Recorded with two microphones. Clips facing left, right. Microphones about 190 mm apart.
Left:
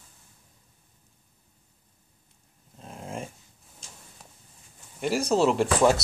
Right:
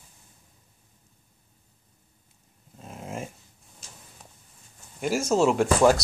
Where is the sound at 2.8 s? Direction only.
5° right (ahead or behind).